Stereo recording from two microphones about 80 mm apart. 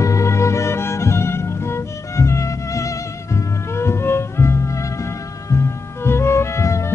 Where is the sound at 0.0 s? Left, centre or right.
Left.